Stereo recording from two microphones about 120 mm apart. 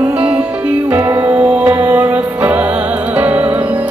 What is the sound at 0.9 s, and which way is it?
Music, 15° right (ahead or behind).